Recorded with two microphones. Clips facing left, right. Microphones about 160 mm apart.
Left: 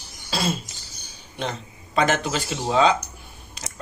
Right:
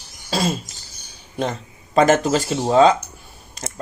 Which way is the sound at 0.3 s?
40° right (ahead or behind).